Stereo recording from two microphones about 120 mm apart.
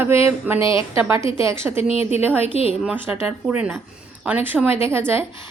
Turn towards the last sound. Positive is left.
turn(degrees=-20)  # may be behind; listen again after turning